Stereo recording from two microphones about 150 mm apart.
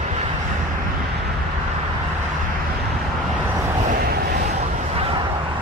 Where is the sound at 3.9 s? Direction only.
80° right.